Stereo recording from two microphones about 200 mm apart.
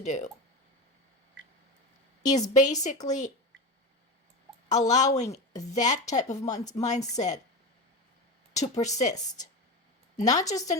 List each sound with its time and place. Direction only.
0.0 s a woman's voice: 35° left (ahead or behind)
2.2 s a woman's voice: 35° left (ahead or behind)
4.7 s a woman's voice: 35° left (ahead or behind)
8.5 s a woman's voice: 35° left (ahead or behind)
10.2 s a woman's voice: 35° left (ahead or behind)